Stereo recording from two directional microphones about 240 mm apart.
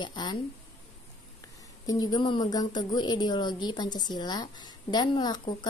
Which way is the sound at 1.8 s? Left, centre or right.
Centre.